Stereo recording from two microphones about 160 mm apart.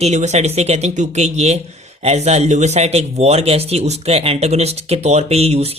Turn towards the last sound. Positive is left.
turn(degrees=-40)  # may be behind; listen again after turning